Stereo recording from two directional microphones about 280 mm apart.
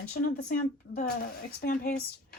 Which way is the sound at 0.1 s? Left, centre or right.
Left.